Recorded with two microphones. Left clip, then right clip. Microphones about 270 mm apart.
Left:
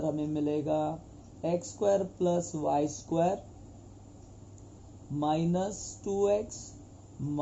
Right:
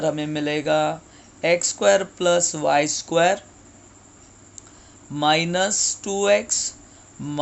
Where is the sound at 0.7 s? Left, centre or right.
Right.